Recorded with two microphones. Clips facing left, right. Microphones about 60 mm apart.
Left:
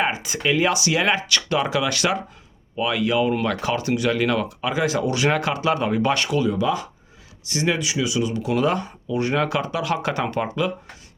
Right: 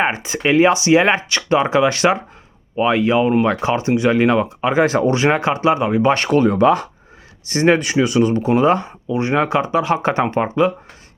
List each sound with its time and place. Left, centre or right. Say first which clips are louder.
0.0 s speech: right 4 dB; right
6.1 s speech: right 7 dB; right